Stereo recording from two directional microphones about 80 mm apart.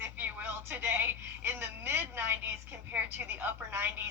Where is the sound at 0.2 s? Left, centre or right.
Right.